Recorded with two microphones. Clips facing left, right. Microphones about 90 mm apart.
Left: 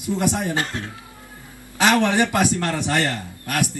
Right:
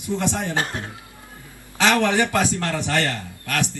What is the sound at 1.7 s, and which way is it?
A man's voice, 20° left (ahead or behind).